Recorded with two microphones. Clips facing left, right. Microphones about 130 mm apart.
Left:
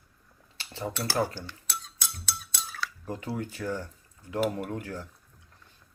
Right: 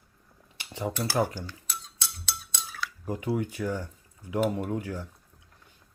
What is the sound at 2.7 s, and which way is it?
Speech, 15° right (ahead or behind).